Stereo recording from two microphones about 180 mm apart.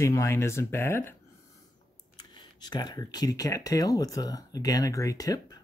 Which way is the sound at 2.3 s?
25° left (ahead or behind).